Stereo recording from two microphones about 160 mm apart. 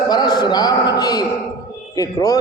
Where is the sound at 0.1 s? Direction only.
25° left (ahead or behind).